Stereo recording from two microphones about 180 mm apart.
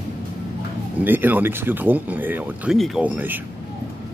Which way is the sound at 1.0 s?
10° right (ahead or behind).